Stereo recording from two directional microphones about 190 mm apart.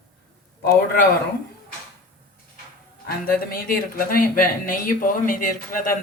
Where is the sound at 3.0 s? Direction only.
50° left (ahead or behind).